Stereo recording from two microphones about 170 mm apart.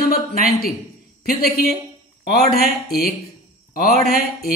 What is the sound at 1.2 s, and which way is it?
A man's voice, 65° left (ahead or behind).